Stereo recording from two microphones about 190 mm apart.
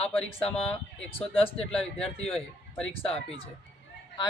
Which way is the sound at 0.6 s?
30° left (ahead or behind).